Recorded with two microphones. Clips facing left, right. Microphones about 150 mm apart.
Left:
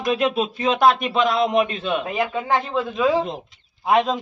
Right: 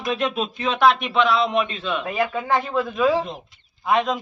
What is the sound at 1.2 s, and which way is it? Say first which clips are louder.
Speech: left 1 dB; 45° left (ahead or behind).